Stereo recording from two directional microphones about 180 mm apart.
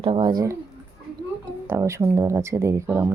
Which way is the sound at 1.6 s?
15° right (ahead or behind).